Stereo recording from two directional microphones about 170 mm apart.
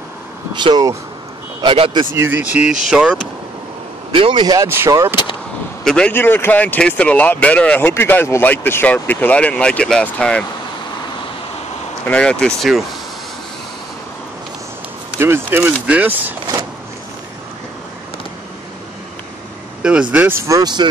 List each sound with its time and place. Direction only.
0.6 s speech: 25° right (ahead or behind)
2.1 s speech: 10° right (ahead or behind)
4.1 s speech: 30° right (ahead or behind)
5.9 s speech: 5° left (ahead or behind)
12.1 s speech: 5° left (ahead or behind)
15.1 s speech: 15° right (ahead or behind)
19.8 s speech: 5° right (ahead or behind); by 20.9 s 25° right (ahead or behind)